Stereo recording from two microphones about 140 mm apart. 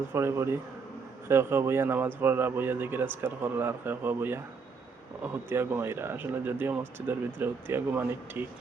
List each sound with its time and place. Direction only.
0.1 s speech: 20° right (ahead or behind)